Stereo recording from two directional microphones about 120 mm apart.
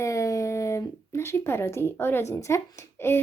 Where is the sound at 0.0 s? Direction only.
25° left (ahead or behind).